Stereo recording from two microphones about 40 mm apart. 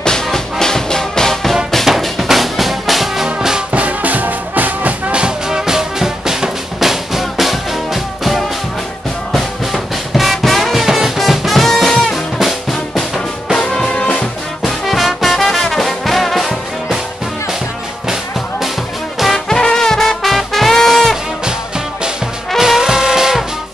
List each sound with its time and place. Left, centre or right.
0.0 s music: centre
3.3 s music: centre
3.7 s music: right
5.1 s music: right
5.7 s music: centre
13.8 s music: left
14.6 s music: centre
19.3 s music: centre
21.5 s music: centre